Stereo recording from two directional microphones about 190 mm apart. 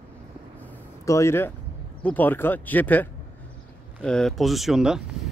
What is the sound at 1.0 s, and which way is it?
Speech, 15° left (ahead or behind).